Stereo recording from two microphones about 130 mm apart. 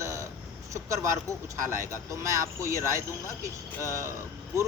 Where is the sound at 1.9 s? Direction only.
25° right (ahead or behind).